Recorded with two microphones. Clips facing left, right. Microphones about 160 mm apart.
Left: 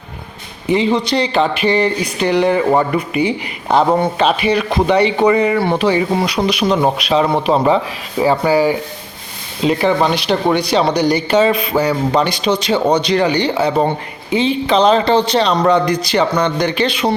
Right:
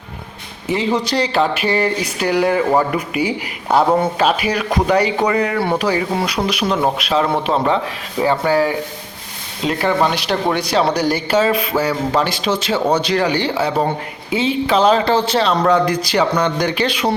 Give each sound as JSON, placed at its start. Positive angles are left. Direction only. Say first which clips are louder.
{"t": 0.7, "sound": "speech", "louder": "left 3 dB", "side_deg": 0}